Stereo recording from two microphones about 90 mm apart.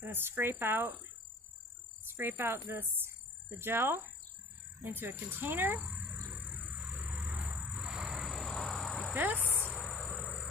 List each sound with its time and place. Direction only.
0.0 s speech: 25° right (ahead or behind)
2.1 s speech: 25° right (ahead or behind)
6.9 s vehicle: 10° right (ahead or behind)
7.8 s a sound: 5° right (ahead or behind)
9.1 s speech: 20° right (ahead or behind)
9.6 s cricket: 15° left (ahead or behind)